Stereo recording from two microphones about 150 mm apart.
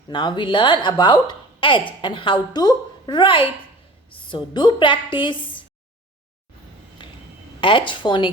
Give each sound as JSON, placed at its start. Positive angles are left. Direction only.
{"t": 0.1, "sound": "a woman's voice", "side_deg": 30}
{"t": 7.0, "sound": "a sound", "side_deg": 30}
{"t": 7.6, "sound": "a woman's voice", "side_deg": 35}